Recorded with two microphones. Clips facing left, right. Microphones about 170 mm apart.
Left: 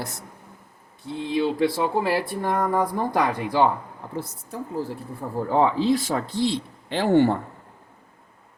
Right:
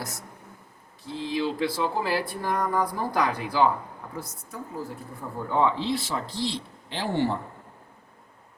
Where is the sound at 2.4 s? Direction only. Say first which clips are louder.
Left 4 dB; 25° left (ahead or behind).